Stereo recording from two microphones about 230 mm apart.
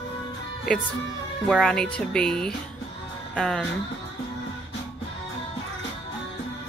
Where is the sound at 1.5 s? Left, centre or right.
Centre.